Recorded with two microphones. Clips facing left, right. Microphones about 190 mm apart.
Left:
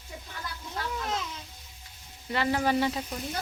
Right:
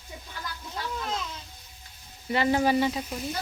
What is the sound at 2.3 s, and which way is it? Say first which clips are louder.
Speech: right 3 dB; 20° right (ahead or behind).